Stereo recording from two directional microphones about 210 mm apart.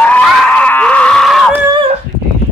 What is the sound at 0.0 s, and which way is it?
Screaming, 5° left (ahead or behind).